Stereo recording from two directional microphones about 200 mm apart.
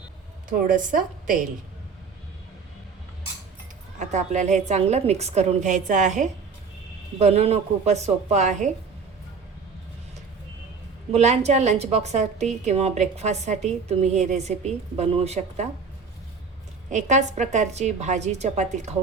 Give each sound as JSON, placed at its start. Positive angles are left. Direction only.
{"t": 0.7, "sound": "a woman's voice", "side_deg": -45}
{"t": 3.9, "sound": "a woman's voice", "side_deg": -35}
{"t": 11.1, "sound": "a woman's voice", "side_deg": -35}
{"t": 16.9, "sound": "a woman's voice", "side_deg": -35}